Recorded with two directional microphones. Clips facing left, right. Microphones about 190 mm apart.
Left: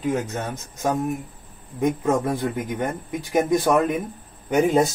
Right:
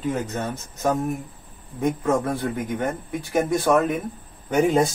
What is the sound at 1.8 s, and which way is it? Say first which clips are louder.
A man's voice: left 1 dB; 15° left (ahead or behind).